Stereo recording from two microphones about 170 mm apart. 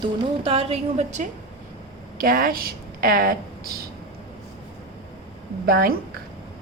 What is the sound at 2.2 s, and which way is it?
A woman's voice, 55° right (ahead or behind).